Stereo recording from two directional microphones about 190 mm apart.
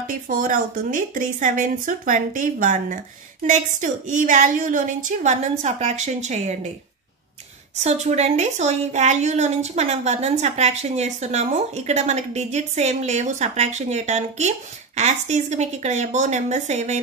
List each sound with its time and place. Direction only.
0.0 s a woman's voice: 45° right (ahead or behind)
7.8 s speech: 35° right (ahead or behind)